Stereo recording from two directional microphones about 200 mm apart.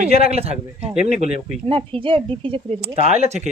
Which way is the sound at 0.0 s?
30° right (ahead or behind).